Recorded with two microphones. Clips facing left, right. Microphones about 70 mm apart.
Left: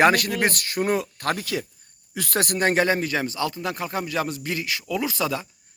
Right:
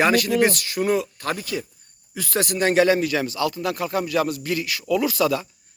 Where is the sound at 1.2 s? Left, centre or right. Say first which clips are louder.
Left 1 dB; left.